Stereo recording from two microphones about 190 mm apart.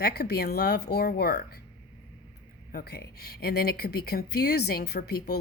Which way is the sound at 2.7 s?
55° left (ahead or behind).